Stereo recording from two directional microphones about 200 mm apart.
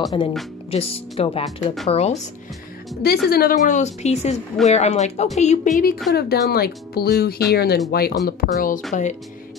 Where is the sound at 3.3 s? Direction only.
45° left (ahead or behind).